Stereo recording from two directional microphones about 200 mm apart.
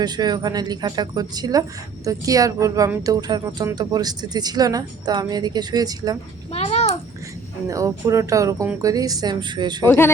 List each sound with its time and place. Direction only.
0.0 s speech: 20° right (ahead or behind)
6.5 s a sound: 30° left (ahead or behind)
7.7 s speech: 15° right (ahead or behind)
9.8 s speech: 10° left (ahead or behind)